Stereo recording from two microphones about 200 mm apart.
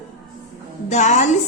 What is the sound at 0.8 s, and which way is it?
Speech, 35° left (ahead or behind).